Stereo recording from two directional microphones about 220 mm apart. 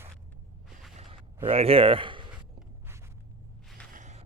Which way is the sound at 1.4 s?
25° right (ahead or behind).